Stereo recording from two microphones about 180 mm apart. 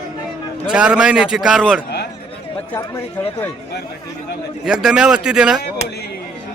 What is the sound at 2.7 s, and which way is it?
Speech, 15° left (ahead or behind).